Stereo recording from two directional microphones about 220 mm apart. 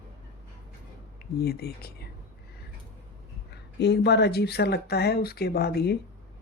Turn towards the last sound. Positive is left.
turn(degrees=45)  # may be behind; listen again after turning